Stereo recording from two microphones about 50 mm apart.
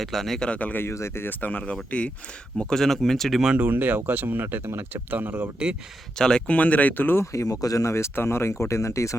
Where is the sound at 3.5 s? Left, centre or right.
Right.